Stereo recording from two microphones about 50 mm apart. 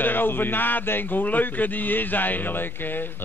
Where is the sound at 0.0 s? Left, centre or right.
Left.